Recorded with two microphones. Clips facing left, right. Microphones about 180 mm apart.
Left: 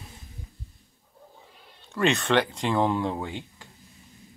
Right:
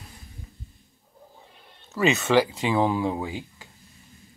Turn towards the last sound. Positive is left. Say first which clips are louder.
# right 2 dB
turn(degrees=0)  # may be behind; listen again after turning